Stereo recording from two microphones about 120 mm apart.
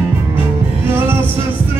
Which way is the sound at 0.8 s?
20° right (ahead or behind).